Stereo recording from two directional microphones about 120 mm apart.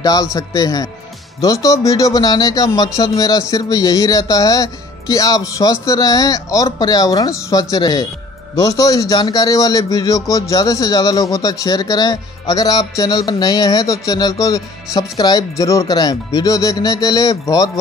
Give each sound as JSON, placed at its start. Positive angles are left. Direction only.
{"t": 0.0, "sound": "speech", "side_deg": 30}